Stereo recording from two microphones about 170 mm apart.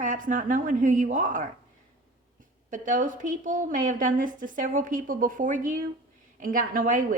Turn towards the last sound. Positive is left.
turn(degrees=-50)  # may be behind; listen again after turning